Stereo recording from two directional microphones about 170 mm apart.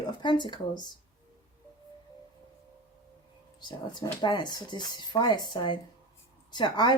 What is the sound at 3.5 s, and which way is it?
Speech, 25° left (ahead or behind).